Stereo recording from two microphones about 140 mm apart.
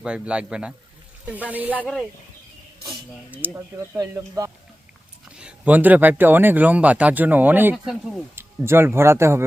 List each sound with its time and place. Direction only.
0.0 s speech: 5° right (ahead or behind)
1.8 s speech: 5° left (ahead or behind)
3.3 s speech: 15° right (ahead or behind)
5.4 s speech: 10° right (ahead or behind)